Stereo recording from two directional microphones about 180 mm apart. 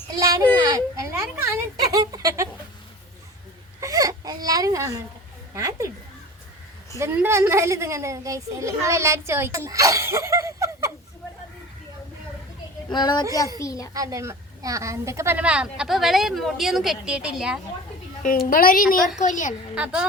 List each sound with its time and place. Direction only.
0.1 s a child's voice: 20° right (ahead or behind)
0.6 s a sound: 20° right (ahead or behind)
3.8 s baby cry: 20° right (ahead or behind)
5.5 s a woman's voice: 15° right (ahead or behind)
7.0 s a woman's voice: 15° right (ahead or behind)
9.6 s laughter: 15° right (ahead or behind)
12.9 s a child's voice: 25° left (ahead or behind)
13.9 s a woman's voice: 20° right (ahead or behind)
18.2 s a woman's voice: 50° left (ahead or behind)
19.7 s a woman's voice: 5° right (ahead or behind)